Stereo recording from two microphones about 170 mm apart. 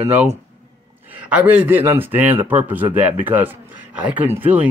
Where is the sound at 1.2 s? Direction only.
10° right (ahead or behind).